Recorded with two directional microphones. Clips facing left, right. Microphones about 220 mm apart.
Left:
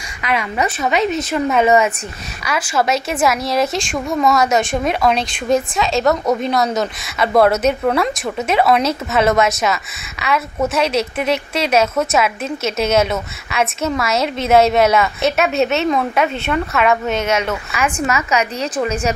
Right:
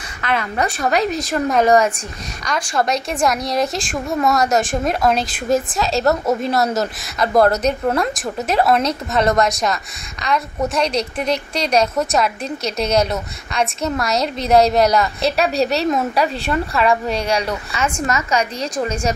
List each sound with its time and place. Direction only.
0.2 s a woman's voice: 10° left (ahead or behind)
15.2 s speech: 35° right (ahead or behind)
18.0 s a woman's voice: 5° left (ahead or behind)